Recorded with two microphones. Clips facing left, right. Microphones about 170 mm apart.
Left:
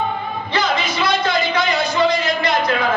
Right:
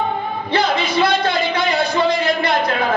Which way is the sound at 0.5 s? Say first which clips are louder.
Right 2 dB; 60° right (ahead or behind).